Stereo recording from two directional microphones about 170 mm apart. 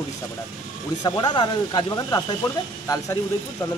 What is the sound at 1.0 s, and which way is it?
Speech, 25° left (ahead or behind).